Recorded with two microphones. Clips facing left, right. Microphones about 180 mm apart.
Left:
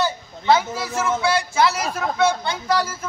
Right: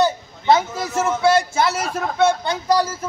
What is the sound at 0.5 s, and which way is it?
Speech, 45° right (ahead or behind).